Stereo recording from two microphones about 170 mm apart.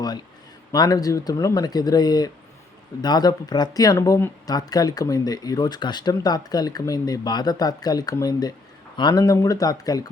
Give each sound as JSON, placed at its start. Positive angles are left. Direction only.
{"t": 0.7, "sound": "speech", "side_deg": 20}